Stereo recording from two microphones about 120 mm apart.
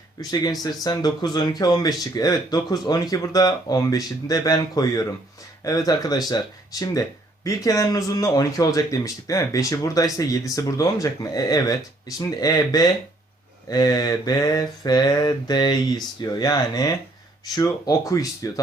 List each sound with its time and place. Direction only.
0.2 s speech: 35° left (ahead or behind)